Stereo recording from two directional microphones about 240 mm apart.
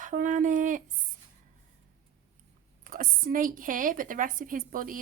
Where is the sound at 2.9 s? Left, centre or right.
Right.